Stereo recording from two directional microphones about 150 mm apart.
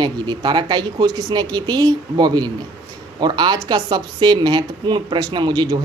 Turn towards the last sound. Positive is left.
turn(degrees=-30)  # may be behind; listen again after turning